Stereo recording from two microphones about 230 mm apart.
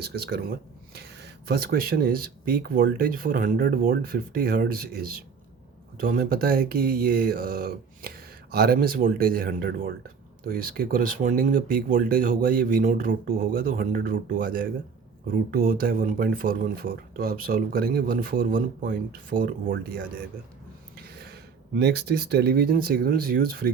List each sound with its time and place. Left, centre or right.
0.0 s speech: right
20.9 s a sound: right
21.8 s speech: right